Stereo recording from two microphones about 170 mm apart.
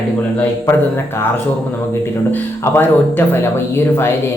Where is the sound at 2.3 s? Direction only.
10° left (ahead or behind).